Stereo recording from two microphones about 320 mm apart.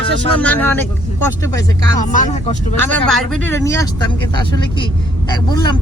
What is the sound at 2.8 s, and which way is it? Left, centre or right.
Speech, centre.